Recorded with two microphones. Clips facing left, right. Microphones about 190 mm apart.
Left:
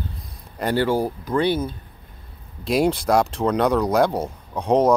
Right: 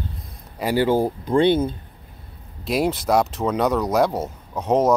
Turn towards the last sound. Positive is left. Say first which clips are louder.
# left 1 dB
turn(degrees=-5)  # may be behind; listen again after turning